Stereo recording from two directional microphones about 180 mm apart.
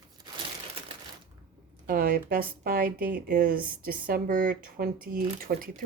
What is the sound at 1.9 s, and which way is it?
Speech, 55° right (ahead or behind).